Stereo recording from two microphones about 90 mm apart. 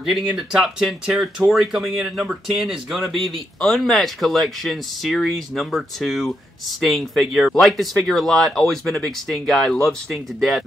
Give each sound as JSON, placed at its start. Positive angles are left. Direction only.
{"t": 0.1, "sound": "speech", "side_deg": 0}